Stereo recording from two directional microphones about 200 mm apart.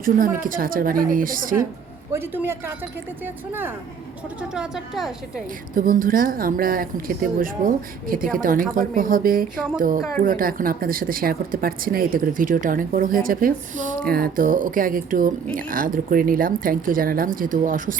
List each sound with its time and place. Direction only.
0.0 s speech: 45° right (ahead or behind)
2.1 s a woman's voice: 10° right (ahead or behind)
5.7 s speech: 45° right (ahead or behind)